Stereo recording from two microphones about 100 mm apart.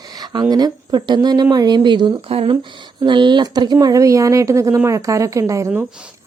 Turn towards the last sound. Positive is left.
turn(degrees=-30)  # may be behind; listen again after turning